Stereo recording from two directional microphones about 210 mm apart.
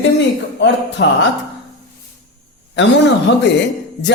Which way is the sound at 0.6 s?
55° left (ahead or behind).